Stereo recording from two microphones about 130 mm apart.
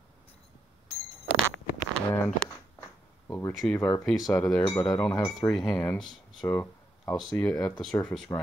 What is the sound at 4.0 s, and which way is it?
Speech, centre (ahead or behind).